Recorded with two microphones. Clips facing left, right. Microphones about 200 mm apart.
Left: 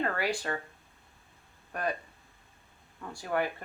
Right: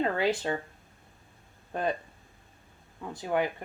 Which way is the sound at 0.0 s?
20° right (ahead or behind).